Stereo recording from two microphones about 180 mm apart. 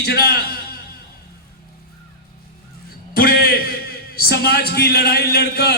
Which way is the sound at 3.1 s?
55° left (ahead or behind).